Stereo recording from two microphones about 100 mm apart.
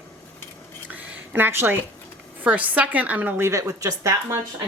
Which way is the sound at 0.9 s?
15° right (ahead or behind).